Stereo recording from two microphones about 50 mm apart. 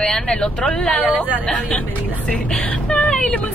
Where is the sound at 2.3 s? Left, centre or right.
Left.